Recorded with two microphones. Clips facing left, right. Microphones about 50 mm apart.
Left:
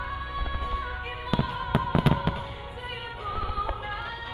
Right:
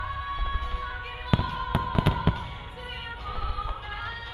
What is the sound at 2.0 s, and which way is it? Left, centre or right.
Fireworks, centre.